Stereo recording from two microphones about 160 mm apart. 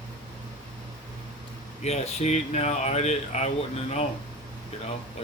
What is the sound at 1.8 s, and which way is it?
Speech, 40° left (ahead or behind).